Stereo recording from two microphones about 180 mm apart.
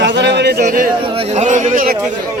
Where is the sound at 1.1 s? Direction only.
40° right (ahead or behind).